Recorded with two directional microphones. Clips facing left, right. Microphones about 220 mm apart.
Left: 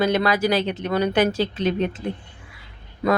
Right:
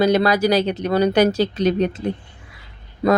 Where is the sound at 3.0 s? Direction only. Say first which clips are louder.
Right 4 dB; 35° right (ahead or behind).